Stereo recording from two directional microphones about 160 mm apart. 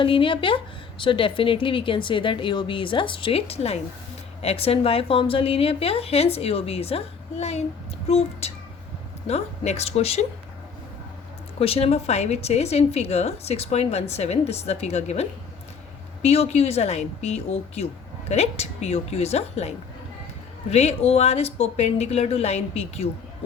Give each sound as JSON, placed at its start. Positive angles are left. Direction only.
{"t": 0.0, "sound": "a woman's voice", "side_deg": 30}
{"t": 11.6, "sound": "a woman's voice", "side_deg": 40}